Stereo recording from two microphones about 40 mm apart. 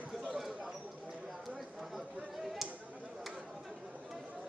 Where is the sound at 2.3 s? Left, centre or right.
Centre.